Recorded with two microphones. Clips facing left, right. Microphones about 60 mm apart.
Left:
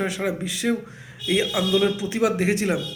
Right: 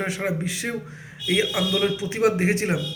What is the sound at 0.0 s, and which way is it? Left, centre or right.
A man's voice, right.